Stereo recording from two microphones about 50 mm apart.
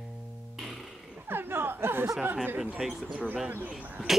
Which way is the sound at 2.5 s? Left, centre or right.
Right.